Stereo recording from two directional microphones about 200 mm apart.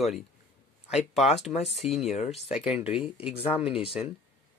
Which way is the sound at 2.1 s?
35° left (ahead or behind).